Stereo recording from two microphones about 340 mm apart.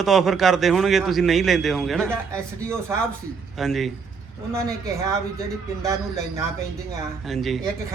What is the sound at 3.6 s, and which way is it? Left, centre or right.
Speech, centre.